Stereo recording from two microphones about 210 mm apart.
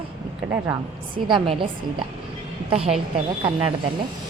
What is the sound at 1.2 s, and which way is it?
Speech, 25° right (ahead or behind).